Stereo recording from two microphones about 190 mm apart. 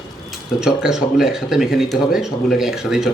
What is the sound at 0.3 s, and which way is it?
Speech, 5° right (ahead or behind).